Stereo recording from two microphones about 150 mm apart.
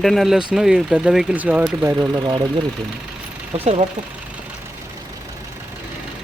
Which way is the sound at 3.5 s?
45° right (ahead or behind).